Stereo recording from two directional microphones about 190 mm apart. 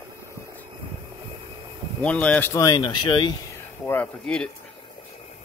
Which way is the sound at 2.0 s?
5° left (ahead or behind).